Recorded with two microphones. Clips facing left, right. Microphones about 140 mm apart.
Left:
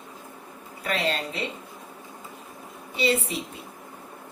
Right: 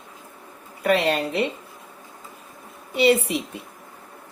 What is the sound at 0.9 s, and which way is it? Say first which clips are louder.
Speech: right 7 dB; 70° right (ahead or behind).